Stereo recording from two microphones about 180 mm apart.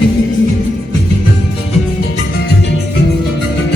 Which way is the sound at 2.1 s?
60° left (ahead or behind).